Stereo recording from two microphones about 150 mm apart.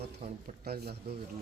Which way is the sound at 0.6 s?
90° right.